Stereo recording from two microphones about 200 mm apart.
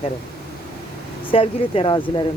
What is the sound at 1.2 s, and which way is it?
Speech, 25° left (ahead or behind).